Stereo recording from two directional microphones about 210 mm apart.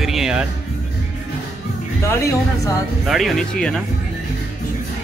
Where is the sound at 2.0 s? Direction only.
15° left (ahead or behind).